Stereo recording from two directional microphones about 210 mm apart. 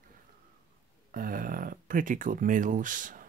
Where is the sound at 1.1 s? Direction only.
40° right (ahead or behind).